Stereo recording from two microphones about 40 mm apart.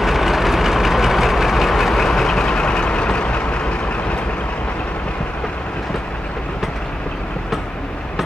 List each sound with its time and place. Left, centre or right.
0.0 s vehicle: centre
2.0 s vehicle: centre
2.4 s vehicle: left